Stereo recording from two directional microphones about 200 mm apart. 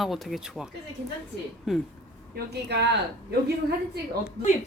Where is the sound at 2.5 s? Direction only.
55° right (ahead or behind).